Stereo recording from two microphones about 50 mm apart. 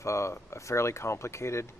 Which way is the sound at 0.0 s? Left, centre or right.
Left.